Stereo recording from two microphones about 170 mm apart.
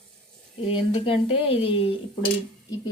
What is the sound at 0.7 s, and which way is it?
A woman's voice, 30° left (ahead or behind).